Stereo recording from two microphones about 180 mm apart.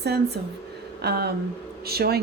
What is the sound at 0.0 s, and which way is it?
A woman's voice, 65° right (ahead or behind).